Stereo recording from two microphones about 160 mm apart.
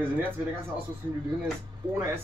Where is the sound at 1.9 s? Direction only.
15° right (ahead or behind).